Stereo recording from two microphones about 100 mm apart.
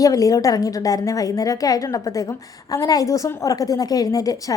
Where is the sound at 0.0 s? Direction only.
35° left (ahead or behind).